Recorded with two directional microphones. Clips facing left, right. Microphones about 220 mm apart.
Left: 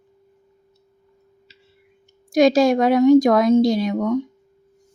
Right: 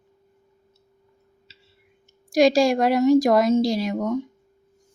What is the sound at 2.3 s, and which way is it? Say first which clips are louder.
A woman's voice: left 2 dB; centre (ahead or behind).